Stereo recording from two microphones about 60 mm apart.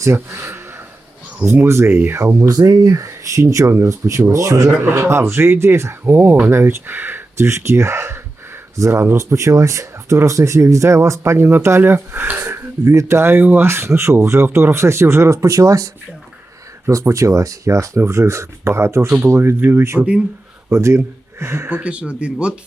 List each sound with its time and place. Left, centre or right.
0.0 s speech: right
1.6 s speech: right
2.5 s speech: right
8.7 s speech: right
11.8 s speech: right
16.9 s speech: right
19.5 s speech: right
20.0 s speech: centre
20.7 s speech: right
21.7 s speech: right